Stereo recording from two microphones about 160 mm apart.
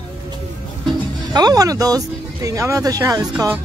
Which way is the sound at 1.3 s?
25° right (ahead or behind).